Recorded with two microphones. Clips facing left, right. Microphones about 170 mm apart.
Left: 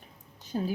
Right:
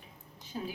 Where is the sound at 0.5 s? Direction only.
50° left (ahead or behind).